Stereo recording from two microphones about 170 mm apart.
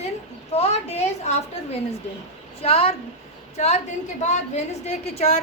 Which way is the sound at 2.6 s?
35° left (ahead or behind).